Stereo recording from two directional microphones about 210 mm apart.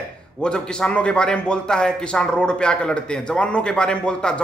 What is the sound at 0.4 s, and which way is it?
A man's voice, 5° left (ahead or behind).